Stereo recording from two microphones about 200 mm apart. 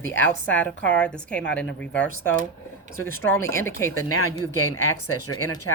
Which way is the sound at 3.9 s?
90° left.